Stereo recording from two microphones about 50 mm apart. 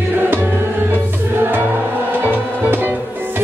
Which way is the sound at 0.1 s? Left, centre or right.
Right.